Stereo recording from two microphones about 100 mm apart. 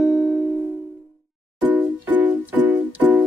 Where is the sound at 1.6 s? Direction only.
15° right (ahead or behind).